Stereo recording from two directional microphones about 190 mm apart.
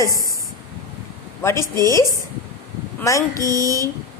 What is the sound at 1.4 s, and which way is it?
A woman's voice, 15° left (ahead or behind).